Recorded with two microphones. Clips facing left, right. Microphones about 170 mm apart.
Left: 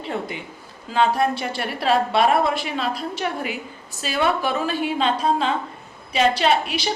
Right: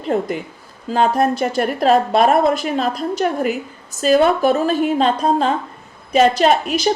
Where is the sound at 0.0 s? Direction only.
45° right (ahead or behind).